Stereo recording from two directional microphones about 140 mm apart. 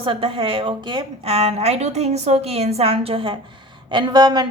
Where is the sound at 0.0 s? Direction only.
40° right (ahead or behind).